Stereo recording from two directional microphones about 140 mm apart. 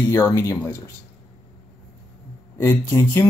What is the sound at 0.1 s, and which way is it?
Speech, 20° left (ahead or behind).